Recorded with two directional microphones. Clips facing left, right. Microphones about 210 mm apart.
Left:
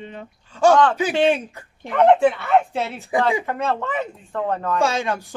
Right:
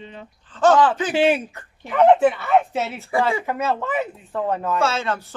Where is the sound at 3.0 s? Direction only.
15° left (ahead or behind).